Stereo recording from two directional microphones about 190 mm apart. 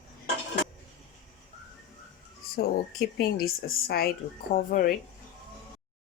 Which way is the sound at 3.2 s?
55° left (ahead or behind).